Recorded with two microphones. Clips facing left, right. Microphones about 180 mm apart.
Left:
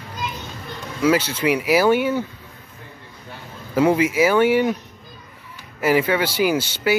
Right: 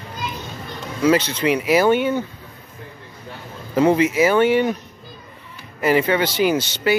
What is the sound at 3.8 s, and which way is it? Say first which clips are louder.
Speech: right 1 dB; 10° left (ahead or behind).